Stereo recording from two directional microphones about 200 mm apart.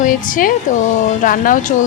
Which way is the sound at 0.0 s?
45° left (ahead or behind).